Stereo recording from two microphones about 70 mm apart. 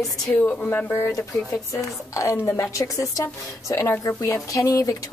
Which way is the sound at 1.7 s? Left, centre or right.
Left.